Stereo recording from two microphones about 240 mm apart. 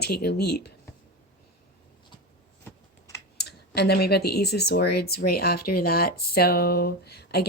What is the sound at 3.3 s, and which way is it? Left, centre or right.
Speech, left.